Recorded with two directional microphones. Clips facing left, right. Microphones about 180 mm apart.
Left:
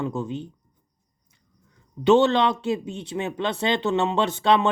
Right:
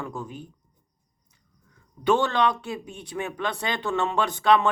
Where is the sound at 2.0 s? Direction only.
25° left (ahead or behind).